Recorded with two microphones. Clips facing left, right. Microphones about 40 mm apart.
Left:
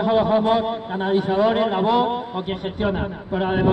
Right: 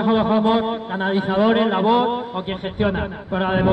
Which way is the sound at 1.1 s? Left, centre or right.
Right.